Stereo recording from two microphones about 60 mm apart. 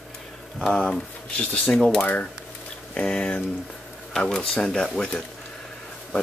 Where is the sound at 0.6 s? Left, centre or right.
Centre.